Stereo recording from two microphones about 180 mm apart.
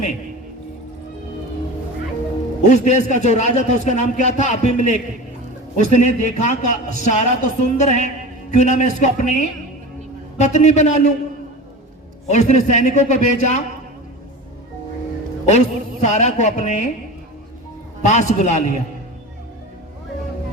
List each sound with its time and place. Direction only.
2.6 s music: 40° left (ahead or behind)
12.3 s music: 40° left (ahead or behind)
15.4 s music: 40° left (ahead or behind)
18.0 s music: 40° left (ahead or behind)